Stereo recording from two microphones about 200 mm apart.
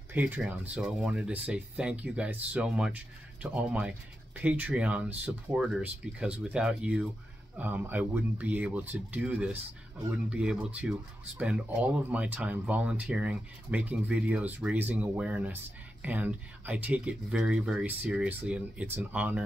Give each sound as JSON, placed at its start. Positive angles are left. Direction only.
{"t": 0.1, "sound": "speech", "side_deg": -10}